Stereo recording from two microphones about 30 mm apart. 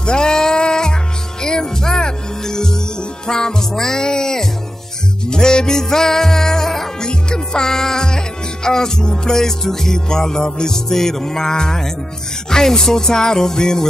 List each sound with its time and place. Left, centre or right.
0.0 s music: left
7.0 s music: left